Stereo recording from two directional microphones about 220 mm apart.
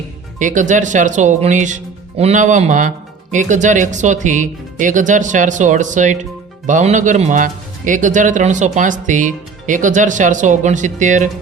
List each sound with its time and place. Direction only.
0.3 s speech: 35° right (ahead or behind)